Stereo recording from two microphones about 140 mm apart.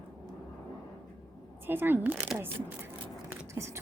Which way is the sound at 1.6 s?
15° right (ahead or behind).